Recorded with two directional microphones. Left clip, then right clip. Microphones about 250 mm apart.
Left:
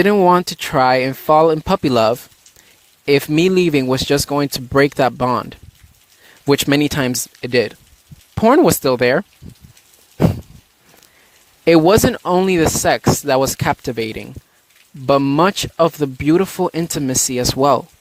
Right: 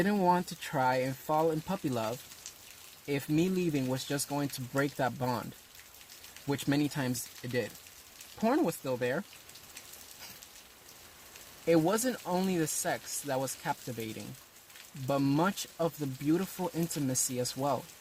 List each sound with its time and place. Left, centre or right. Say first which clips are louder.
0.0 s speech: left 16 dB; left
6.5 s speech: left 17 dB; left
11.6 s speech: left 17 dB; left